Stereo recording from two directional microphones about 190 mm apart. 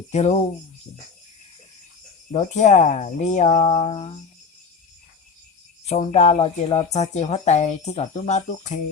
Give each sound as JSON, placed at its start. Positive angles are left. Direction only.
{"t": 0.1, "sound": "speech", "side_deg": 35}
{"t": 2.3, "sound": "speech", "side_deg": 35}
{"t": 5.8, "sound": "speech", "side_deg": 35}